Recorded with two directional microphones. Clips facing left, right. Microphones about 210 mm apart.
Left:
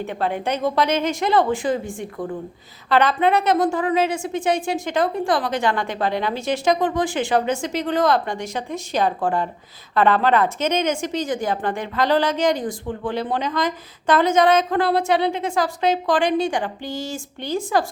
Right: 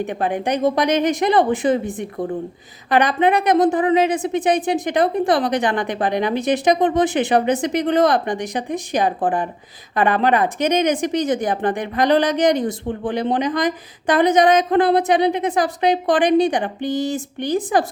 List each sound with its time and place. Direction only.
0.0 s a woman's voice: 15° right (ahead or behind)